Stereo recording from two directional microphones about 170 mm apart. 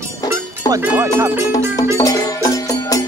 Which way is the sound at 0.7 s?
15° right (ahead or behind).